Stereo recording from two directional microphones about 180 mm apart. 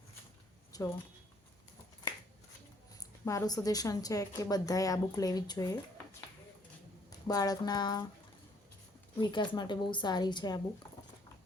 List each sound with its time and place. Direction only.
0.7 s a sound: 15° left (ahead or behind)
3.0 s a woman's voice: 20° left (ahead or behind)
7.3 s a woman's voice: 20° left (ahead or behind)
9.2 s a woman's voice: 25° left (ahead or behind)